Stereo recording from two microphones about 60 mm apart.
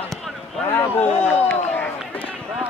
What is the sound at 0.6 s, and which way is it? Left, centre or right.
Speech, left.